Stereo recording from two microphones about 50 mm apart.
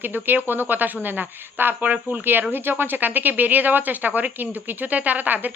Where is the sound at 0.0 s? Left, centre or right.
Right.